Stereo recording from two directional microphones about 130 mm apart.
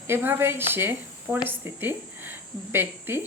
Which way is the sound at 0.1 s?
15° right (ahead or behind).